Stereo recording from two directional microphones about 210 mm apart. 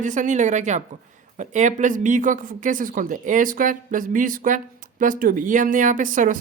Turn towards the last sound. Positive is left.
turn(degrees=-40)  # may be behind; listen again after turning